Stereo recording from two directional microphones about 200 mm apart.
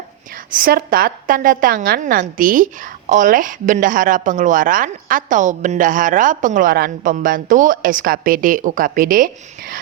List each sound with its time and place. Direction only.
0.3 s a woman's voice: 45° right (ahead or behind)